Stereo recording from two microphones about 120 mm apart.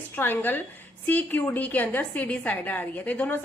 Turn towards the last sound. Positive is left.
turn(degrees=15)  # may be behind; listen again after turning